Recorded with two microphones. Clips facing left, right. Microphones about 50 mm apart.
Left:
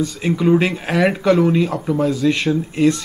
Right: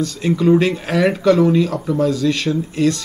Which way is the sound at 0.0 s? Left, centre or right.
Centre.